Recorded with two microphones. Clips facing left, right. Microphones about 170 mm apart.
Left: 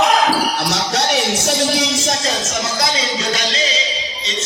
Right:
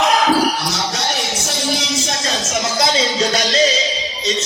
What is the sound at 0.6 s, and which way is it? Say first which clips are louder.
Speech: left 3 dB; 65° left (ahead or behind).